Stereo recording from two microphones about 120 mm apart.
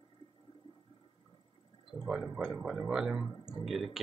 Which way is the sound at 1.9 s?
5° right (ahead or behind).